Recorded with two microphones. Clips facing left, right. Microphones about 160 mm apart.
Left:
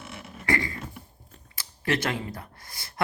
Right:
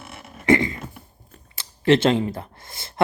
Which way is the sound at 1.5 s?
25° right (ahead or behind).